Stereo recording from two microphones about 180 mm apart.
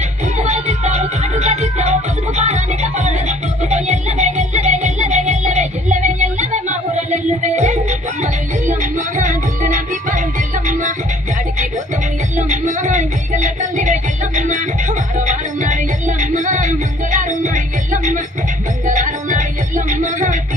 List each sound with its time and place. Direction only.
0.3 s music: 40° right (ahead or behind)
12.4 s music: 45° right (ahead or behind)